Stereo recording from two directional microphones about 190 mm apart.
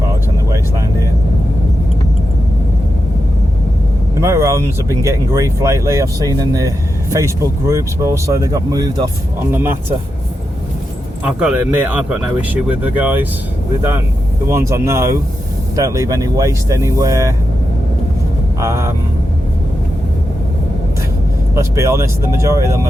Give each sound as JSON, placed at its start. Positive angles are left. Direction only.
{"t": 4.2, "sound": "speech", "side_deg": -15}
{"t": 11.3, "sound": "speech", "side_deg": -5}
{"t": 14.4, "sound": "speech", "side_deg": -15}
{"t": 18.6, "sound": "speech", "side_deg": -15}
{"t": 21.5, "sound": "speech", "side_deg": -15}